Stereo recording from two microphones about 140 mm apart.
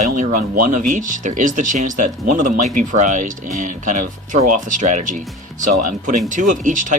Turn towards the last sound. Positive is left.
turn(degrees=-65)  # may be behind; listen again after turning